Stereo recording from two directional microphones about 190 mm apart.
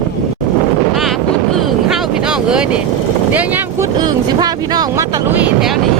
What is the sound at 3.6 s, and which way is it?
Speech, 20° right (ahead or behind).